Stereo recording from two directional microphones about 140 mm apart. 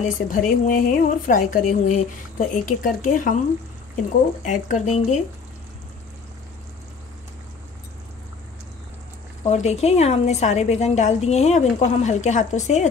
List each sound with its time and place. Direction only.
0.0 s a woman's voice: 70° left (ahead or behind)
4.5 s speech: 60° left (ahead or behind)
9.4 s a woman's voice: 50° left (ahead or behind)